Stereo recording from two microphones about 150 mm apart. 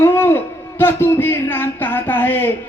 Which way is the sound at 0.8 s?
15° left (ahead or behind).